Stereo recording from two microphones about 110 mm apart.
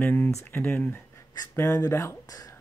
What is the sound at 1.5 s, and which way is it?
Speech, 30° left (ahead or behind).